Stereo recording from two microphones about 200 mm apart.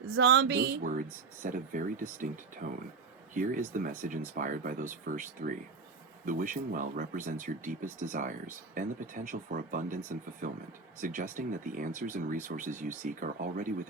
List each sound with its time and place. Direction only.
0.2 s music: 65° right (ahead or behind)
0.9 s speech: 40° right (ahead or behind)